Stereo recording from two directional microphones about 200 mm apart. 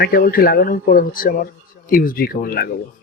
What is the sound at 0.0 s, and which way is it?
Speech, 50° left (ahead or behind).